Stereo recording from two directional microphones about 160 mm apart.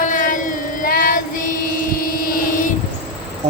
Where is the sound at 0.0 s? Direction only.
55° left (ahead or behind).